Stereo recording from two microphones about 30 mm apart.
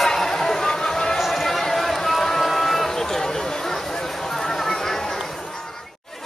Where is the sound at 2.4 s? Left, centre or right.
Centre.